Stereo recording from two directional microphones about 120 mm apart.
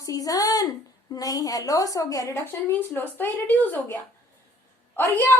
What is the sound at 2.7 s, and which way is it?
A woman's voice, 15° left (ahead or behind).